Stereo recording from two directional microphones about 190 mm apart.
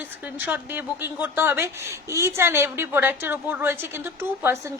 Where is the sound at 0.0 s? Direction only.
10° right (ahead or behind).